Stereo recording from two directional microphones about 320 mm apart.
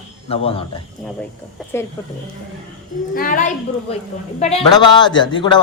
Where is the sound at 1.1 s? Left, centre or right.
Centre.